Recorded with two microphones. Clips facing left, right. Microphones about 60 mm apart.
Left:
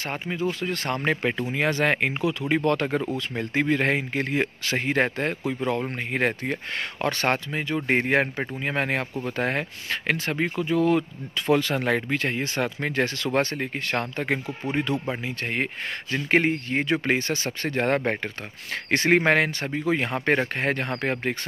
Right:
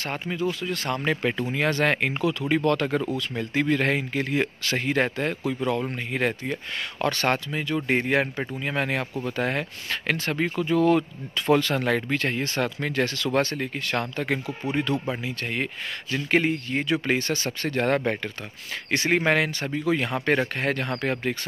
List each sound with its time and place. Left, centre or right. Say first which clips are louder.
0.0 s speech: even; left
1.4 s speech: right 1 dB; centre
5.7 s speech: even; left
7.1 s speech: even; left
10.5 s speech: right 2 dB; centre
11.7 s speech: even; centre
15.5 s speech: left 1 dB; left
18.9 s speech: left 2 dB; left